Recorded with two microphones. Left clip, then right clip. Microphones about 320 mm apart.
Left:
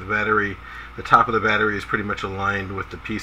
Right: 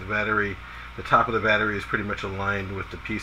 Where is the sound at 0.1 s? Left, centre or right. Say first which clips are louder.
Left 4 dB; centre.